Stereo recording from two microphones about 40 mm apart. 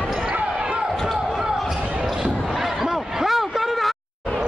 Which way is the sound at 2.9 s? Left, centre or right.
Centre.